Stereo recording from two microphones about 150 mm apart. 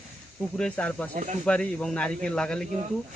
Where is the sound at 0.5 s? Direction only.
5° left (ahead or behind).